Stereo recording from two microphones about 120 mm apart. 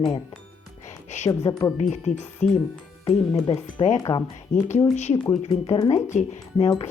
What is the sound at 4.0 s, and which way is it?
Speech, 35° left (ahead or behind).